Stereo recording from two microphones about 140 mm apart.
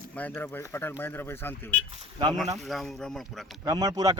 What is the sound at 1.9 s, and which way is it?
Speech, 35° right (ahead or behind).